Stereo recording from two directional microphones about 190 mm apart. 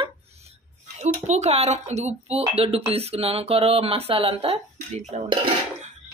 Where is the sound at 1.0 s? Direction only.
35° right (ahead or behind).